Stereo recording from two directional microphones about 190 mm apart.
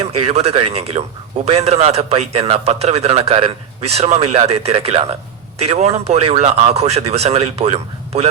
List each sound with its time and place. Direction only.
0.0 s a man's voice: 35° right (ahead or behind)